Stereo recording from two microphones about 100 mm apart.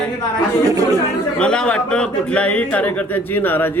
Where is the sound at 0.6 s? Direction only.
35° right (ahead or behind).